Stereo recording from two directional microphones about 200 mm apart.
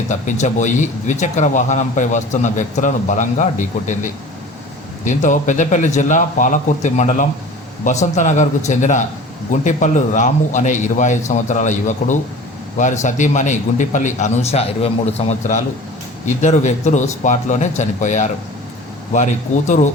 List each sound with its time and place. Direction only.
0.1 s speech: 35° left (ahead or behind)